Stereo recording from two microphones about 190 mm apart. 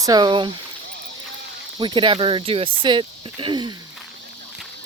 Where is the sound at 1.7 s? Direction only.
25° right (ahead or behind).